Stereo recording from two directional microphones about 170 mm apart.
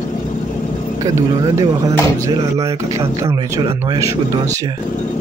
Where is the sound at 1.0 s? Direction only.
20° right (ahead or behind).